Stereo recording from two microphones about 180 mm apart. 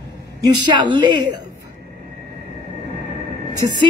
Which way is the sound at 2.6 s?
70° right (ahead or behind).